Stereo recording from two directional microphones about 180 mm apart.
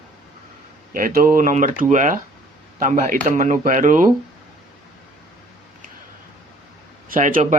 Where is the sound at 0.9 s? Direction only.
50° right (ahead or behind).